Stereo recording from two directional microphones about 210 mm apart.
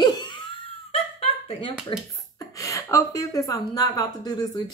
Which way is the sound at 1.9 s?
15° left (ahead or behind).